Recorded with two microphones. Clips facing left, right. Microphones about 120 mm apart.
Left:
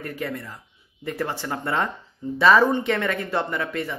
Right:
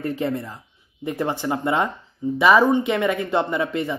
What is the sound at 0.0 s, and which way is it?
Speech, 25° right (ahead or behind).